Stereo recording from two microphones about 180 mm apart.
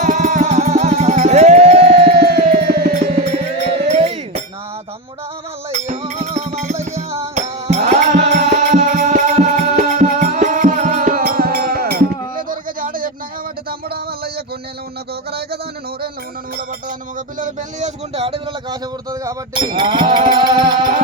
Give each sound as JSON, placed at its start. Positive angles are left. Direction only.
{"t": 0.0, "sound": "music", "side_deg": -45}
{"t": 2.1, "sound": "music", "side_deg": -65}
{"t": 3.9, "sound": "music", "side_deg": -35}
{"t": 5.7, "sound": "music", "side_deg": -40}
{"t": 13.7, "sound": "a sound", "side_deg": -60}
{"t": 17.2, "sound": "a sound", "side_deg": -45}
{"t": 19.1, "sound": "music", "side_deg": -20}